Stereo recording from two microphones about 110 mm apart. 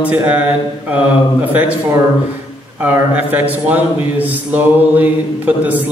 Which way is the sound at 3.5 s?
15° right (ahead or behind).